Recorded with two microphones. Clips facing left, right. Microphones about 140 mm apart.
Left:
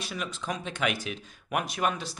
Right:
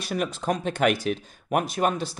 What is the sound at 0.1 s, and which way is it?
Speech, 50° right (ahead or behind).